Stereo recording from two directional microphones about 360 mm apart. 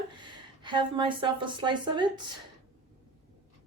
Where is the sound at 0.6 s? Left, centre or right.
Centre.